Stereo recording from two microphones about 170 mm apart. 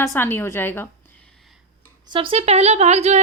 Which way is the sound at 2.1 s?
30° right (ahead or behind).